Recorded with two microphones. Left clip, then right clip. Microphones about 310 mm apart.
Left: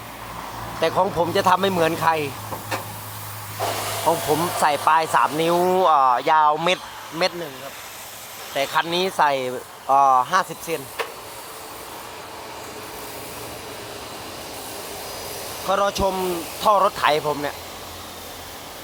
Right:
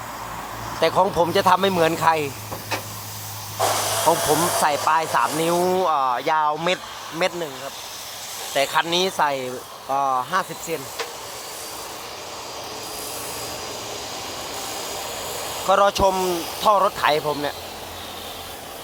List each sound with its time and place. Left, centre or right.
0.8 s speech: centre
4.0 s speech: centre
5.8 s speech: centre
8.5 s speech: centre
9.1 s speech: centre
9.9 s speech: left
15.6 s speech: centre
16.6 s speech: centre